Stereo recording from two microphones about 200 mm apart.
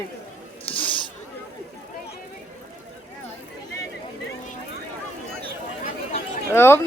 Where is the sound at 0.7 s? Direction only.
25° left (ahead or behind).